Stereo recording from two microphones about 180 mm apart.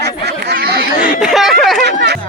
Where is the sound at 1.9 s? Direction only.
65° right (ahead or behind).